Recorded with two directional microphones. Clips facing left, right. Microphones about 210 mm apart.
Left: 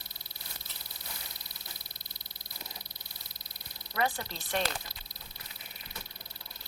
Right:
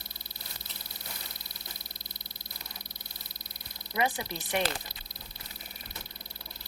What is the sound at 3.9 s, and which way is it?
Speech, 15° right (ahead or behind).